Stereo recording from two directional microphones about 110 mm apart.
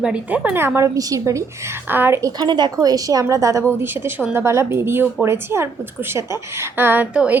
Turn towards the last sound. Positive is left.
turn(degrees=-15)  # may be behind; listen again after turning